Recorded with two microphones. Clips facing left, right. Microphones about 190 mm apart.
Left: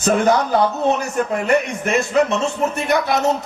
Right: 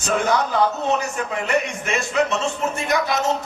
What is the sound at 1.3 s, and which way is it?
A man's voice, 55° left (ahead or behind).